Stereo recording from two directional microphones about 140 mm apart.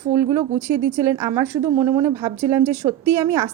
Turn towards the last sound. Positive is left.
turn(degrees=-20)  # may be behind; listen again after turning